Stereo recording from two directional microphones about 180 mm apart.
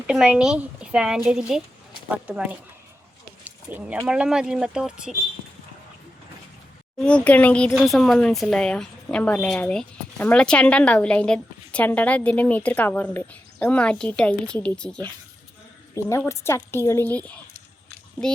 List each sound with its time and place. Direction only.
0.1 s speech: 5° right (ahead or behind)
7.0 s a woman's voice: 5° left (ahead or behind)